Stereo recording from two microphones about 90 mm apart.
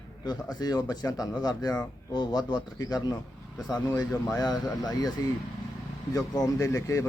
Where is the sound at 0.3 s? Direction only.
50° left (ahead or behind).